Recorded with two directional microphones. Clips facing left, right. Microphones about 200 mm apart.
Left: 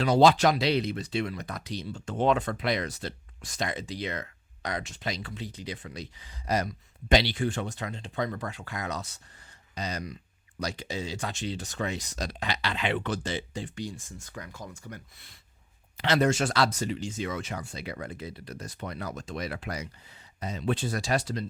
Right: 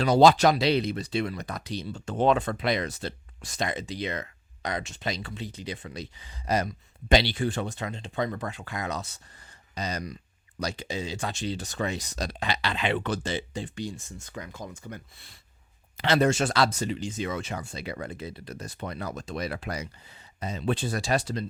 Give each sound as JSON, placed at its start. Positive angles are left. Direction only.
{"t": 0.0, "sound": "speech", "side_deg": -40}
{"t": 9.7, "sound": "speech", "side_deg": -40}
{"t": 10.6, "sound": "speech", "side_deg": -25}